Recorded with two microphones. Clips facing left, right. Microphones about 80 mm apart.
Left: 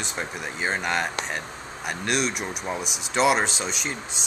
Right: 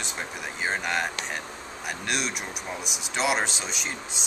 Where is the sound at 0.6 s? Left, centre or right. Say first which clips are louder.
Left 2 dB; left.